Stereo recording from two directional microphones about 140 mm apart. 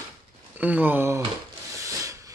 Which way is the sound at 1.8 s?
25° right (ahead or behind).